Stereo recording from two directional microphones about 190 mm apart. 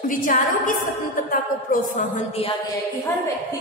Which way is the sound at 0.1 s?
45° left (ahead or behind).